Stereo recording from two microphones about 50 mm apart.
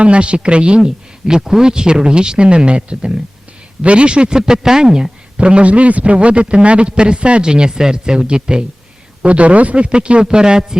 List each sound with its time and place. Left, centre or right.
0.0 s a man's voice: right
9.2 s a man's voice: right